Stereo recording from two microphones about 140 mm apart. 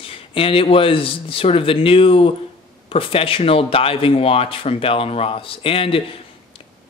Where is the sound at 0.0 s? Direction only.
40° left (ahead or behind).